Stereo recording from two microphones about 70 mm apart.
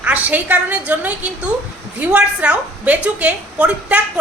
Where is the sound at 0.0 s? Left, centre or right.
Right.